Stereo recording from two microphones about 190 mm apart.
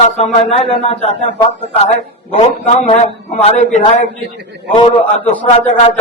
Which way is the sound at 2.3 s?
35° left (ahead or behind).